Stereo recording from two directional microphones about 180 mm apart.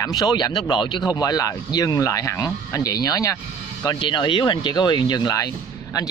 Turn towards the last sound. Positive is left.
turn(degrees=20)  # may be behind; listen again after turning